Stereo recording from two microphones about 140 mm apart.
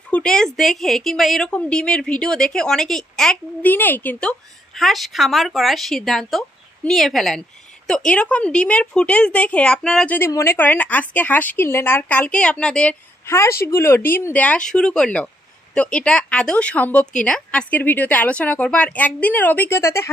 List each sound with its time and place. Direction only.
0.1 s a woman's voice: 5° left (ahead or behind)
13.3 s a woman's voice: 20° left (ahead or behind)